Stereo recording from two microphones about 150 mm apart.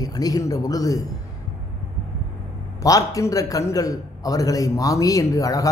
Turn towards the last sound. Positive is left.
turn(degrees=20)  # may be behind; listen again after turning